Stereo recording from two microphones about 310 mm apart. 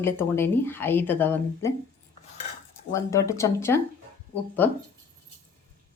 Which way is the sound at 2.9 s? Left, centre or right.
Centre.